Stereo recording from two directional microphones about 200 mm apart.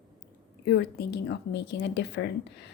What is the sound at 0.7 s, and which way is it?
A woman's voice, 55° left (ahead or behind).